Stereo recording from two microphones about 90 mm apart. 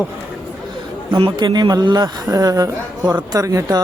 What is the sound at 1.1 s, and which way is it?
A man's voice, 65° right (ahead or behind).